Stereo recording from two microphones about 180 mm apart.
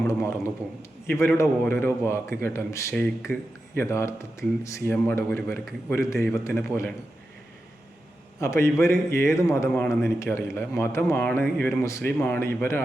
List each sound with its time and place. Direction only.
0.0 s a man's voice: 15° left (ahead or behind)
8.4 s a man's voice: 15° left (ahead or behind)
12.1 s a man's voice: 5° left (ahead or behind)